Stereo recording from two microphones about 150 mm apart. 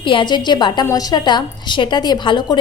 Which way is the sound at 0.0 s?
35° left (ahead or behind).